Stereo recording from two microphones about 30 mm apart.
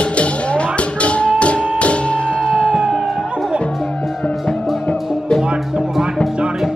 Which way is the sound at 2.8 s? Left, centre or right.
Centre.